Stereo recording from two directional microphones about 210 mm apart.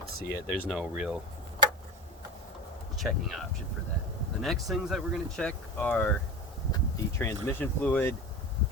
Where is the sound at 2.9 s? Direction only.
Centre (ahead or behind).